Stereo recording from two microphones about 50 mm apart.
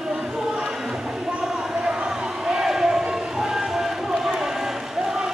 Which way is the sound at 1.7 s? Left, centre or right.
Centre.